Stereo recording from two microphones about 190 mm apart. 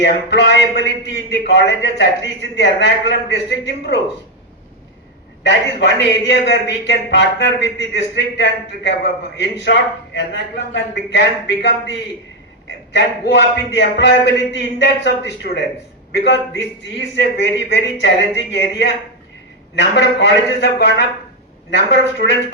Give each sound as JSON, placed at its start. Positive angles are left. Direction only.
{"t": 0.0, "sound": "a man's voice", "side_deg": 65}
{"t": 5.4, "sound": "a man's voice", "side_deg": 65}